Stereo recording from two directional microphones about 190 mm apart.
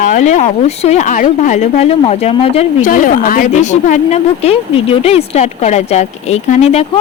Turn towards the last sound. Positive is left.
turn(degrees=35)  # may be behind; listen again after turning